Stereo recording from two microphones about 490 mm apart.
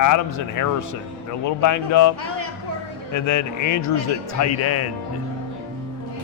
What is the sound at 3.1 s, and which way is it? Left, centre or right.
Speech, left.